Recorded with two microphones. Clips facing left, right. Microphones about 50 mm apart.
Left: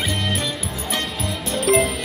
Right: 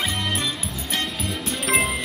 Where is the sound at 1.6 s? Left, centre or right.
Centre.